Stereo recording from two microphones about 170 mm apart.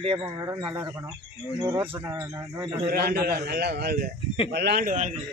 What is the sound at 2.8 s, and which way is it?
A man's voice, 65° right (ahead or behind).